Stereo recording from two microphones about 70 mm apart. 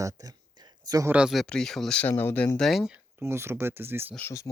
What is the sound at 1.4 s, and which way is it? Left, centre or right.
Speech, centre.